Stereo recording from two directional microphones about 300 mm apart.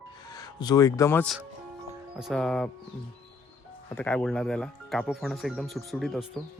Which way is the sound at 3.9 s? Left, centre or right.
Centre.